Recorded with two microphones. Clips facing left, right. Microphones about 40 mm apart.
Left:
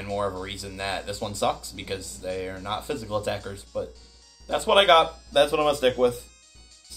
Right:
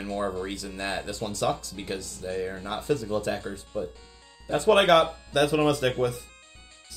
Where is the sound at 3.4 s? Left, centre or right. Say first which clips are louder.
Left 1 dB; right.